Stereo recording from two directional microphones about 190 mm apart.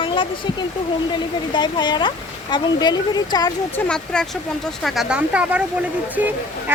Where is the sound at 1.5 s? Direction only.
25° left (ahead or behind).